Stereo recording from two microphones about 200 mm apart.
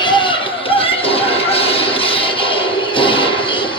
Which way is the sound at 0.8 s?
30° left (ahead or behind).